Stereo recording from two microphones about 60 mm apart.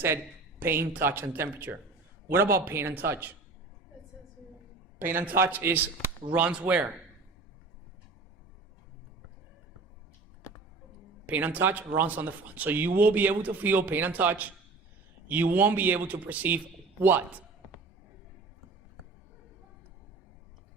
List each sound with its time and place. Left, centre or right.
0.6 s speech: right
4.9 s speech: right
6.4 s speech: centre
11.3 s speech: right